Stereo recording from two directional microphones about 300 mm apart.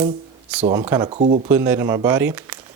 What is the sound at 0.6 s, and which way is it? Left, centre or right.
Speech, right.